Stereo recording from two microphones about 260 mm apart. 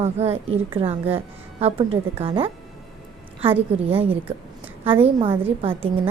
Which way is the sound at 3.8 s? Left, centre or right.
Right.